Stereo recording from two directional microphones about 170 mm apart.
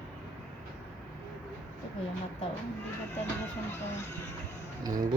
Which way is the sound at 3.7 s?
15° left (ahead or behind).